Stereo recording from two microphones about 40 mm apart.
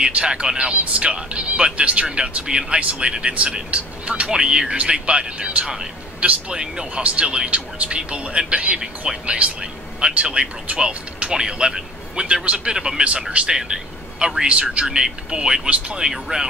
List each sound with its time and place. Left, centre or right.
0.0 s speech: right
7.0 s speech: right
11.3 s a man's voice: centre
12.7 s speech: centre
13.0 s speech: right
13.5 s speech: centre
14.5 s speech: right
14.9 s speech: centre
16.1 s speech: centre